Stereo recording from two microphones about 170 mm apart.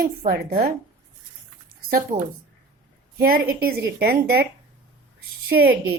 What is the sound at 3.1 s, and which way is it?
Speech, 60° right (ahead or behind).